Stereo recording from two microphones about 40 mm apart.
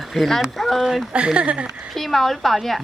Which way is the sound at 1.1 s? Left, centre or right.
Right.